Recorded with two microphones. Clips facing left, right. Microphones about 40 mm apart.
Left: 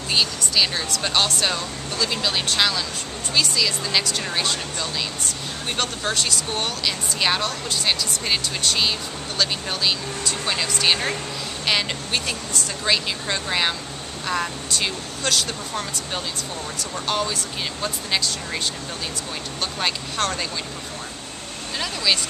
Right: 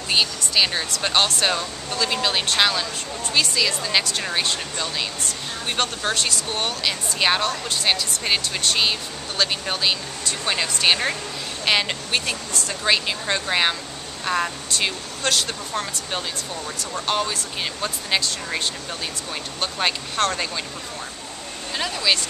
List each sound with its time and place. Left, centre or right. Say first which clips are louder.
0.1 s speech: right 1 dB; centre
9.4 s speech: right 1 dB; centre
19.6 s speech: right 2 dB; centre
21.7 s speech: right 1 dB; centre